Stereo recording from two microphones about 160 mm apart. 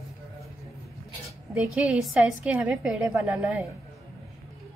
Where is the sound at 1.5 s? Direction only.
5° right (ahead or behind).